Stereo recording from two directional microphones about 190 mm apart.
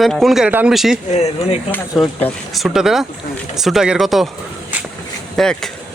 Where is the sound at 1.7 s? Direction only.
10° left (ahead or behind).